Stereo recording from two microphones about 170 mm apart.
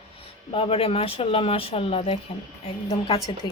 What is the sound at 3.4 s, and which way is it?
Speech, 25° left (ahead or behind).